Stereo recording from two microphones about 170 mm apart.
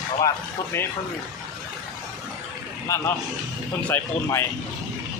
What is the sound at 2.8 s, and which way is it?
Speech, 15° left (ahead or behind).